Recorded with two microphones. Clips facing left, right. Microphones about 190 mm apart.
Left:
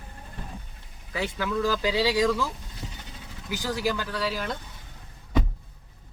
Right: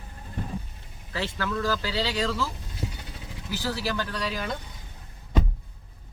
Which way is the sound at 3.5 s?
15° left (ahead or behind).